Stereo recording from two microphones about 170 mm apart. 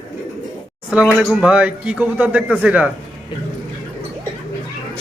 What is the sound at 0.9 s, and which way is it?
A man's voice, 5° right (ahead or behind).